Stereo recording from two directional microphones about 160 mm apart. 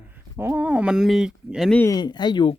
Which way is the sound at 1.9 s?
25° left (ahead or behind).